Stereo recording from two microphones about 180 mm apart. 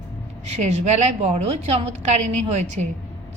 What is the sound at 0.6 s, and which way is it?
A woman's voice, 40° right (ahead or behind).